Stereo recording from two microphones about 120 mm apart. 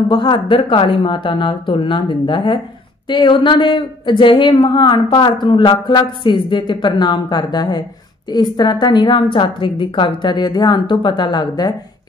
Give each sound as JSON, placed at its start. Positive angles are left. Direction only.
{"t": 0.1, "sound": "a woman's voice", "side_deg": 40}